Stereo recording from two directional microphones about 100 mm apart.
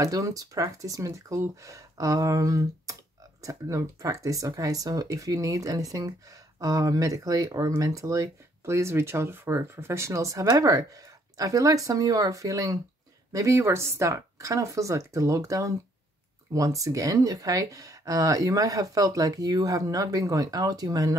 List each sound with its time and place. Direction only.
0.0 s speech: 35° right (ahead or behind)